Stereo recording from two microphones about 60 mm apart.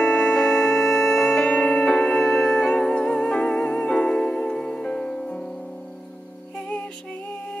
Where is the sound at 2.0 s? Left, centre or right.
Centre.